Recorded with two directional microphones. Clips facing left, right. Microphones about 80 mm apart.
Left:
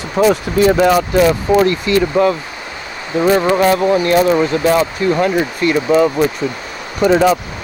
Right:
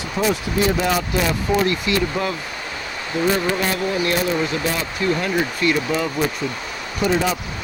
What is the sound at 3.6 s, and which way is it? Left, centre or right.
Speech, left.